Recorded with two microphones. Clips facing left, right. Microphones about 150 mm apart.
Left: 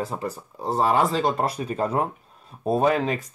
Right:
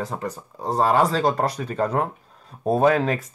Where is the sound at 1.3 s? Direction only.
30° left (ahead or behind).